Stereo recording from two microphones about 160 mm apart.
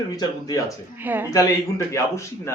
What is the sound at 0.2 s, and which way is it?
Speech, 25° left (ahead or behind).